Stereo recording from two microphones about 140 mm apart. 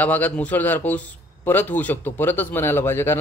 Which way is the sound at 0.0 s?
10° left (ahead or behind).